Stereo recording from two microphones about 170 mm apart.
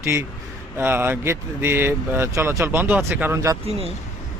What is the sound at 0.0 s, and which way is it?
A man's voice, 15° right (ahead or behind).